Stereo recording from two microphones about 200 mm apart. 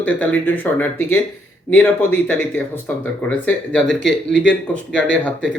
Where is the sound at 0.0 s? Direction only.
10° left (ahead or behind).